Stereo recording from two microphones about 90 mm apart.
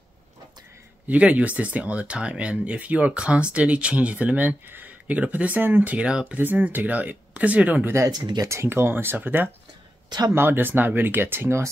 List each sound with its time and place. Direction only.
1.0 s speech: 15° right (ahead or behind)
7.9 s speech: 40° right (ahead or behind)
8.5 s speech: 30° right (ahead or behind)
10.0 s speech: 50° right (ahead or behind)
10.3 s speech: 25° right (ahead or behind)